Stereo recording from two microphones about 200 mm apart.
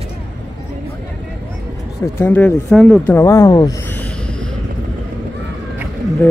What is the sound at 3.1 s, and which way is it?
Speech, 15° left (ahead or behind).